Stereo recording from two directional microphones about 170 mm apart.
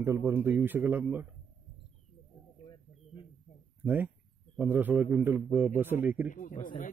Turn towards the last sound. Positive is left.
turn(degrees=50)  # may be behind; listen again after turning